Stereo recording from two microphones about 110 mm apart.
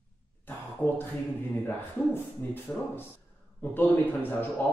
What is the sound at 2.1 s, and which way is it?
A man's voice, 20° left (ahead or behind).